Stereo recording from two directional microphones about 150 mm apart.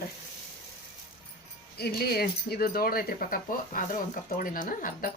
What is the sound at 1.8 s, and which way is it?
Speech, 90° left.